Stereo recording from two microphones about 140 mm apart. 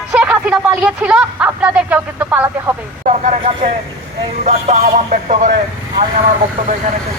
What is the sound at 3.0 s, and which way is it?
Vehicle, 60° right (ahead or behind).